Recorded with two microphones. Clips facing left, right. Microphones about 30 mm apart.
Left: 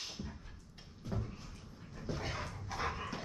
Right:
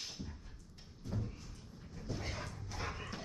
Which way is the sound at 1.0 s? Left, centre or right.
Centre.